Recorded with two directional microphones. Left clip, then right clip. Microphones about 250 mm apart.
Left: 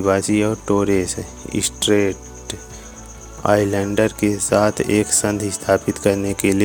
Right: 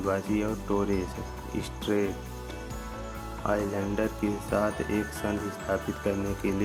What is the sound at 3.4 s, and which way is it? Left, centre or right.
Speech, left.